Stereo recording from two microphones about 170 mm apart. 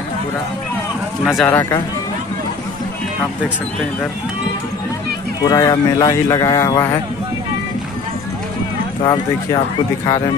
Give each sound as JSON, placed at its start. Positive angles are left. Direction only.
{"t": 1.2, "sound": "speech", "side_deg": 0}
{"t": 5.4, "sound": "speech", "side_deg": 25}
{"t": 9.0, "sound": "speech", "side_deg": 25}